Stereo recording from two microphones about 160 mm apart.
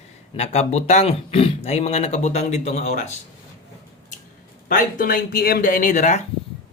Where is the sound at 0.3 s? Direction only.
40° left (ahead or behind).